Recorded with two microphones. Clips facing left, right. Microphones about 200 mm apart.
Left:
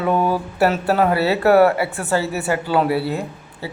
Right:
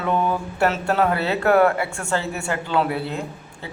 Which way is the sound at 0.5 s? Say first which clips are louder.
Left 3 dB; 5° left (ahead or behind).